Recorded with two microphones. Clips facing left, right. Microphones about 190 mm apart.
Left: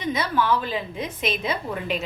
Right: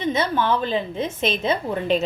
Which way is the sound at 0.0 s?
25° right (ahead or behind).